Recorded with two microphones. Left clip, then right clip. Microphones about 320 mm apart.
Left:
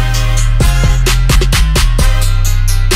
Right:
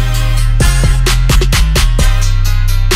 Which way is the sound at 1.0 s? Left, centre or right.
Right.